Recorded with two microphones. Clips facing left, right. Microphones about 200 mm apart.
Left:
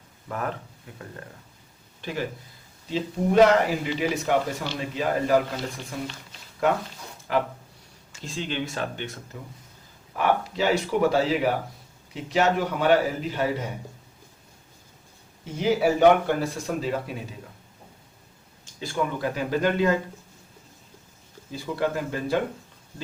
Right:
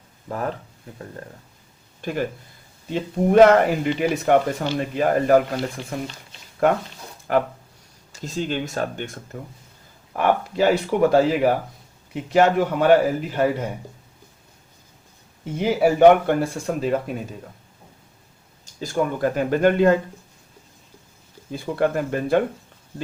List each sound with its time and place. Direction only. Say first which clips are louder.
0.3 s speech: right 3 dB; 30° right (ahead or behind)
2.0 s speech: right 5 dB; 50° right (ahead or behind)
7.3 s speech: right 4 dB; 50° right (ahead or behind)
15.5 s speech: right 3 dB; 55° right (ahead or behind)
18.6 s speech: right 4 dB; 40° right (ahead or behind)
21.5 s speech: right 5 dB; 55° right (ahead or behind)